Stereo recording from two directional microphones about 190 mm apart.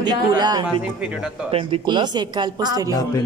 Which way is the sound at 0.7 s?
5° right (ahead or behind).